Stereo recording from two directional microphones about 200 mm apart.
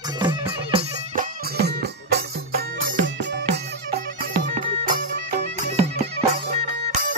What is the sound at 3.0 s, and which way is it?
Music, 60° right (ahead or behind).